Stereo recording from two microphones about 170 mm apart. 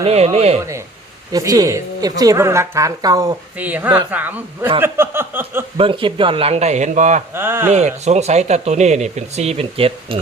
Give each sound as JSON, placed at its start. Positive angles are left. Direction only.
{"t": 0.0, "sound": "speech", "side_deg": -35}
{"t": 1.3, "sound": "a woman's voice", "side_deg": -20}
{"t": 3.6, "sound": "a woman's voice", "side_deg": -10}
{"t": 5.7, "sound": "speech", "side_deg": -30}
{"t": 7.3, "sound": "a woman's voice", "side_deg": -15}
{"t": 7.7, "sound": "speech", "side_deg": -40}